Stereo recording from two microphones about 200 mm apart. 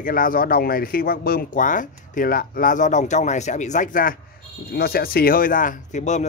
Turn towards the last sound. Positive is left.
turn(degrees=35)  # may be behind; listen again after turning